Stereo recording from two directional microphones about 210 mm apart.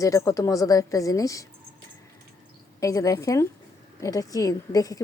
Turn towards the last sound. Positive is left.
turn(degrees=15)  # may be behind; listen again after turning